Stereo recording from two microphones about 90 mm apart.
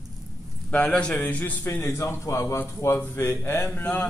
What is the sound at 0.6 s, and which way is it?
A man's voice, 10° left (ahead or behind).